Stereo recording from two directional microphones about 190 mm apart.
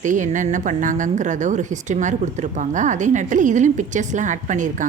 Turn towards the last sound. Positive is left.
turn(degrees=-40)  # may be behind; listen again after turning